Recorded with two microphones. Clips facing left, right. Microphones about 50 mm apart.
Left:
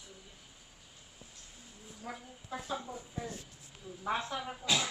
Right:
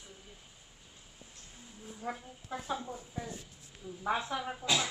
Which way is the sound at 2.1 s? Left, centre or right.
Centre.